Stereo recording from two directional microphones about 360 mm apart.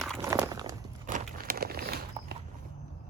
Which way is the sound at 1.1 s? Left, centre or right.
Right.